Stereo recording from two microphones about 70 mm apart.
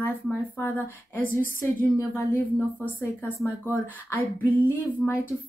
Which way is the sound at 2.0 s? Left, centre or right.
Left.